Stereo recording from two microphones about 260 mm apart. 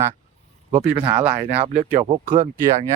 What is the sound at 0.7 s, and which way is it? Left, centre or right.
Speech, centre.